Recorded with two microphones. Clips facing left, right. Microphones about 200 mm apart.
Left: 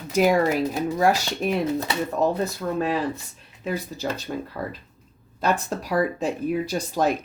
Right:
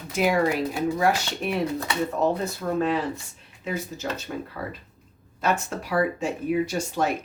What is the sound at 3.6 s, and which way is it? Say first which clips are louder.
Speech: left 2 dB; 35° left (ahead or behind).